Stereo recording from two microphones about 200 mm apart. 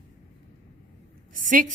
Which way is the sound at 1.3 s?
40° right (ahead or behind).